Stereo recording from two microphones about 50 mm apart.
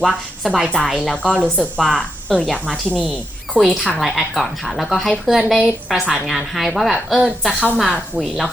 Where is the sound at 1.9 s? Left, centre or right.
Left.